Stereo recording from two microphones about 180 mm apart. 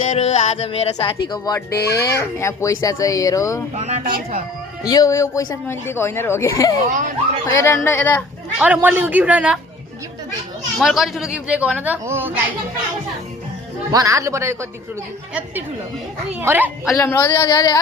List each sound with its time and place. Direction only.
0.1 s speech: 40° left (ahead or behind)
2.0 s speech: 15° left (ahead or behind)
3.8 s a woman's voice: 40° right (ahead or behind)
4.0 s speech: 50° right (ahead or behind)
4.9 s speech: 20° left (ahead or behind)
6.8 s speech: 45° right (ahead or behind)
7.4 s speech: 15° left (ahead or behind)
8.5 s speech: 10° right (ahead or behind)
10.8 s speech: centre (ahead or behind)
13.9 s speech: 20° right (ahead or behind)
16.3 s speech: 10° right (ahead or behind)
17.0 s speech: 15° left (ahead or behind)